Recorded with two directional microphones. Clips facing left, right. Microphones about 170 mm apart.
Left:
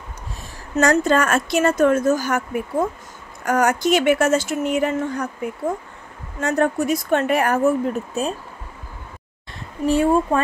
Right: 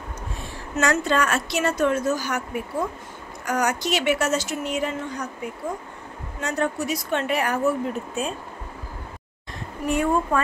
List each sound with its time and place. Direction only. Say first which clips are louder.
0.7 s a woman's voice: left 5 dB; 40° left (ahead or behind)
6.4 s a woman's voice: left 6 dB; 50° left (ahead or behind)
9.8 s speech: left 5 dB; 30° left (ahead or behind)